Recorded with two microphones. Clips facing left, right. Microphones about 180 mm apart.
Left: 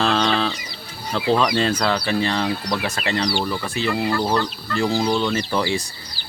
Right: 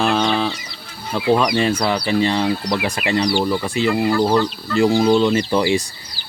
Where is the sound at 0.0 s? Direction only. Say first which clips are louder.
Right 2 dB; 10° right (ahead or behind).